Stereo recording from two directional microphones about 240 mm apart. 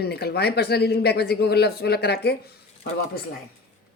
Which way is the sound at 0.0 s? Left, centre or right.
Left.